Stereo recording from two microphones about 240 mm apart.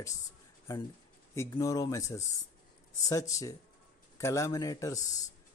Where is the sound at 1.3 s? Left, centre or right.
Centre.